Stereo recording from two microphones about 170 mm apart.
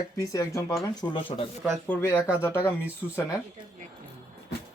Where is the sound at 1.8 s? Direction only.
10° left (ahead or behind).